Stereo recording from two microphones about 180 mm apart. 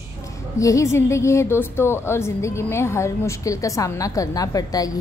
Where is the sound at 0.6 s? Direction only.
15° left (ahead or behind).